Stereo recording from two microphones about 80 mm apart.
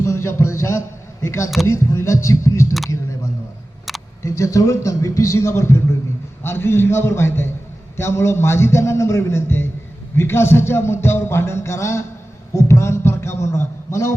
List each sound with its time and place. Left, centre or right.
0.0 s a sound: left
1.2 s music: left
4.2 s music: left
12.5 s a man's voice: left